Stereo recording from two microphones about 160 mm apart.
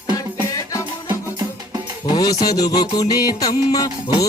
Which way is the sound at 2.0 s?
25° left (ahead or behind).